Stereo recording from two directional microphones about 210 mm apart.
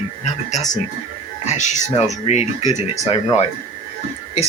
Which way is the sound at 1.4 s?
35° left (ahead or behind).